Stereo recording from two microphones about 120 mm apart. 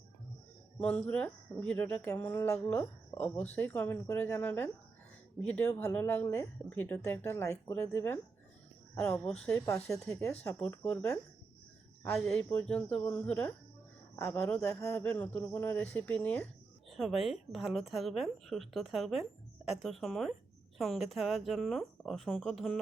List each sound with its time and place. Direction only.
0.8 s speech: 15° left (ahead or behind)
12.2 s speech: 10° left (ahead or behind)
16.9 s speech: centre (ahead or behind)